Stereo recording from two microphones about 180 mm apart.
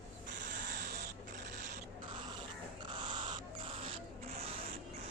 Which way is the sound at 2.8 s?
25° right (ahead or behind).